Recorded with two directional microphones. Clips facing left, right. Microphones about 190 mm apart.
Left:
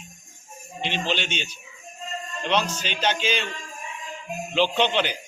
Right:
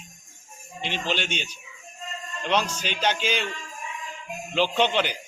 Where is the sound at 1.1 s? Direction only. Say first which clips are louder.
Left 1 dB; 10° right (ahead or behind).